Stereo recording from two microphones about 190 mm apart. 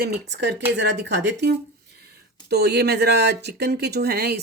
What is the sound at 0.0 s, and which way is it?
Speech, 65° right (ahead or behind).